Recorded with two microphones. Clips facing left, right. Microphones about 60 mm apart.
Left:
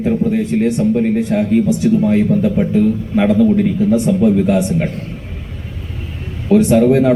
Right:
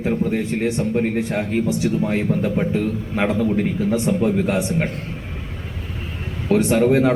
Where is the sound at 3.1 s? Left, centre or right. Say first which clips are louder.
Left 7 dB; right.